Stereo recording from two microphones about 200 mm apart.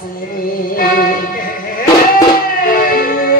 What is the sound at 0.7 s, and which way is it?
Music, 45° left (ahead or behind).